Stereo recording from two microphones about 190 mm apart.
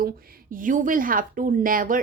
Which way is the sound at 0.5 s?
45° right (ahead or behind).